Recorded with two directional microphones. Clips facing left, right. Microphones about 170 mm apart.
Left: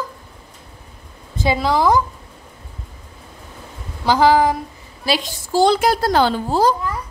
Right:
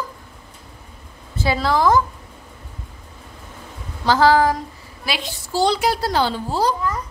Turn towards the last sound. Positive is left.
turn(degrees=50)  # may be behind; listen again after turning